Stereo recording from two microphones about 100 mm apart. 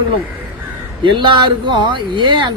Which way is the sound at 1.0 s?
55° right (ahead or behind).